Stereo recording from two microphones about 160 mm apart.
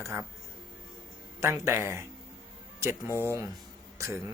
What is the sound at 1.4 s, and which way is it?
Speech, 15° right (ahead or behind).